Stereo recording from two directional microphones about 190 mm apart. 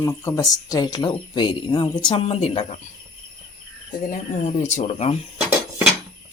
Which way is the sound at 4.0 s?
45° left (ahead or behind).